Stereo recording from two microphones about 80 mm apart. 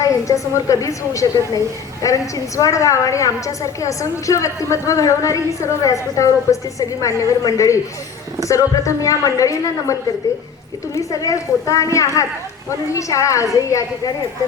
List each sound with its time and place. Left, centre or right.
0.0 s a woman's voice: left